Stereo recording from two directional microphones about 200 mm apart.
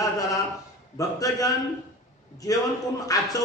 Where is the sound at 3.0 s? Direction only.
15° left (ahead or behind).